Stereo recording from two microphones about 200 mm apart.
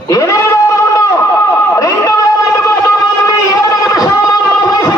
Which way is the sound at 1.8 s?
15° left (ahead or behind).